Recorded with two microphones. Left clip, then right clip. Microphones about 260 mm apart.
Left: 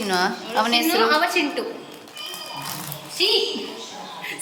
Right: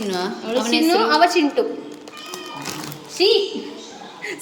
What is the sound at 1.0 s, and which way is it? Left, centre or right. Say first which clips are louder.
Speech: right 4 dB; right.